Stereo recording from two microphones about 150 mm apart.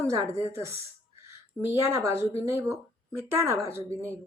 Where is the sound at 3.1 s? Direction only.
15° right (ahead or behind).